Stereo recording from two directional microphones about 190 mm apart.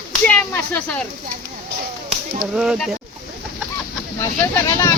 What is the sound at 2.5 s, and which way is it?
Speech, 5° right (ahead or behind).